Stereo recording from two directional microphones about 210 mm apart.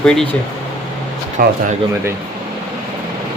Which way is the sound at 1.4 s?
45° right (ahead or behind).